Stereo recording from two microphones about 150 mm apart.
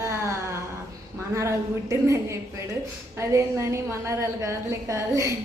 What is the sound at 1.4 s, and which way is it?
A woman's voice, 20° right (ahead or behind).